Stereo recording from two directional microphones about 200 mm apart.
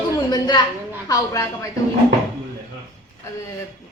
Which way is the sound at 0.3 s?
20° left (ahead or behind).